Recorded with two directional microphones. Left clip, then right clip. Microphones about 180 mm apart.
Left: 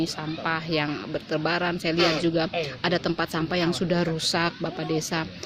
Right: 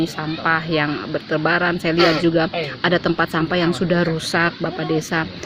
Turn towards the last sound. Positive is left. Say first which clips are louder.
# right 7 dB
turn(degrees=0)  # may be behind; listen again after turning